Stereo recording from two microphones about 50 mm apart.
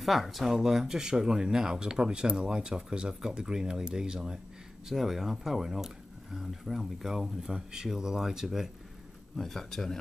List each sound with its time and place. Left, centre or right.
0.0 s speech: centre
9.4 s speech: centre